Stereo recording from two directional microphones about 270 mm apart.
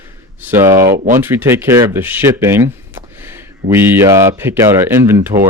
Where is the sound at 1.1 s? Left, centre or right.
Centre.